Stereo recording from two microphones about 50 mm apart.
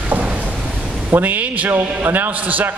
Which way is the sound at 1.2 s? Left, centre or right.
Right.